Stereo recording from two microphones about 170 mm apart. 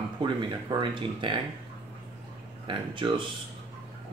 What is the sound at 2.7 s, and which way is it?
Speech, 30° right (ahead or behind).